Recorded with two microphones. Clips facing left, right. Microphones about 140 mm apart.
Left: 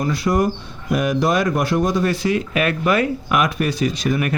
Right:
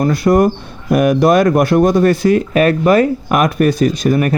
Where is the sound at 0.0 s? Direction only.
55° right (ahead or behind).